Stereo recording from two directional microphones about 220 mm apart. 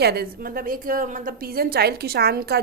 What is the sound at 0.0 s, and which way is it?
A woman's voice, 45° right (ahead or behind).